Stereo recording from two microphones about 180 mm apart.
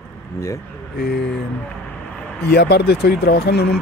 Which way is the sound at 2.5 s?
65° left (ahead or behind).